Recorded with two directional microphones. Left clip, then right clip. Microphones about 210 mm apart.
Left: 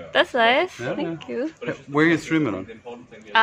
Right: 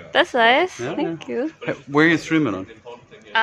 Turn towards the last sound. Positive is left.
turn(degrees=20)  # may be behind; listen again after turning